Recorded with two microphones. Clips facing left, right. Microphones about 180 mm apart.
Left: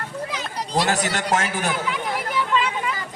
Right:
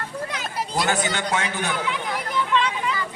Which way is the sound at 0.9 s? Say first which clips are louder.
Left 1 dB; 40° left (ahead or behind).